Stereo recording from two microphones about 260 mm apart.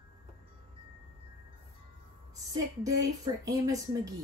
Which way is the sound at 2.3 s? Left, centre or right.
Centre.